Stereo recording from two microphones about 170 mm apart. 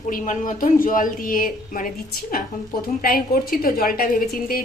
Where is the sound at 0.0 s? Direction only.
50° left (ahead or behind).